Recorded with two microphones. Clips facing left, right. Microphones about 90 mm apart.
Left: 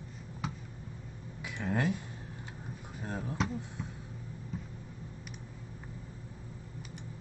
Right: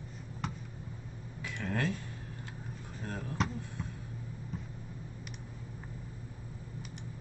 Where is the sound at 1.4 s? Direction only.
10° left (ahead or behind).